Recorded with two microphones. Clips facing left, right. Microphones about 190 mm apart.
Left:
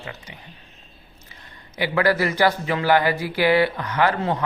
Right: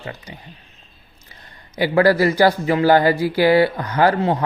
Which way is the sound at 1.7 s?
40° right (ahead or behind).